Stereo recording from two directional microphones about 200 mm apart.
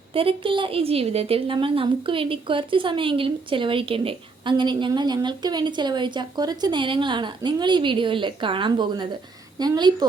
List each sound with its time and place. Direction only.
0.1 s a woman's voice: 25° right (ahead or behind)